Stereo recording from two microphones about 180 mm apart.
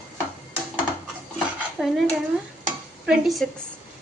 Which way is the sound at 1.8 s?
5° right (ahead or behind).